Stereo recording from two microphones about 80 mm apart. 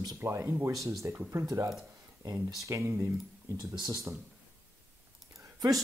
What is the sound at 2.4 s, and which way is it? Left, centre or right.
Speech, right.